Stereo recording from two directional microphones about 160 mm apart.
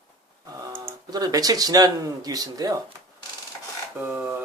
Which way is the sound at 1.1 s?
25° right (ahead or behind).